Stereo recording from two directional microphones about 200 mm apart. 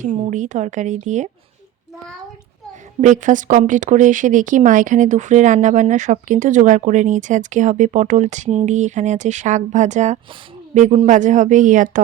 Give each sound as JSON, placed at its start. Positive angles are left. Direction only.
{"t": 0.1, "sound": "speech", "side_deg": -35}
{"t": 3.0, "sound": "speech", "side_deg": -40}